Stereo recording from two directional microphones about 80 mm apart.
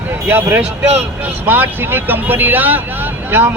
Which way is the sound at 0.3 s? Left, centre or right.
Right.